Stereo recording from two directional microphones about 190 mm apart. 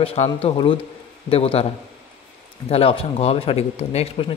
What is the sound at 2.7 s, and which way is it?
A man's voice, 30° left (ahead or behind).